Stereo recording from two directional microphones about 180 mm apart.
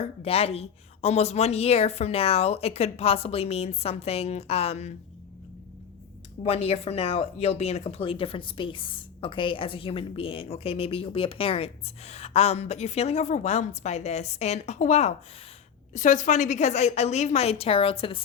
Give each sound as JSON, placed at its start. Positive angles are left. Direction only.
{"t": 0.0, "sound": "speech", "side_deg": 35}
{"t": 6.4, "sound": "speech", "side_deg": 35}